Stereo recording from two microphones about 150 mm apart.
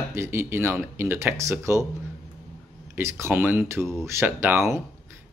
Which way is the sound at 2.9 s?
15° right (ahead or behind).